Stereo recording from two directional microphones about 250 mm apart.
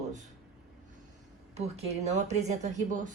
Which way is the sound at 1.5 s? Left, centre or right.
Right.